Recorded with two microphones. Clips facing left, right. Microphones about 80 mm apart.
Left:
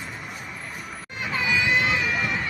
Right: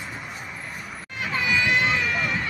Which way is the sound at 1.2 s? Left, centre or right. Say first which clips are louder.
Right 1 dB; centre.